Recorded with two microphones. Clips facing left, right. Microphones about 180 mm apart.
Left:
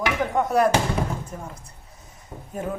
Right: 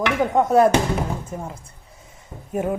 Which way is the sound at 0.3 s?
25° right (ahead or behind).